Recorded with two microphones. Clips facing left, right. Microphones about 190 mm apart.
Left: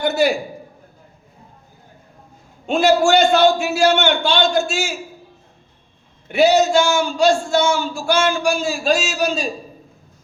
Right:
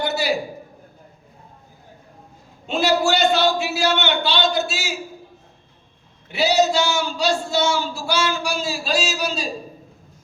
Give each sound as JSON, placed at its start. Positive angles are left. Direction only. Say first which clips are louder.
{"t": 0.0, "sound": "a sound", "louder": "left 5 dB", "side_deg": 50}
{"t": 2.6, "sound": "a man's voice", "louder": "left 5 dB", "side_deg": 50}
{"t": 6.2, "sound": "a man's voice", "louder": "left 4 dB", "side_deg": 50}